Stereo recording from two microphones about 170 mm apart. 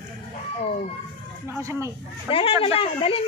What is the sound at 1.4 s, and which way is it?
Speech, 15° right (ahead or behind).